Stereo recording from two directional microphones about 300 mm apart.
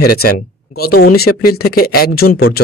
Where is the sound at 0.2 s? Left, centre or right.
Left.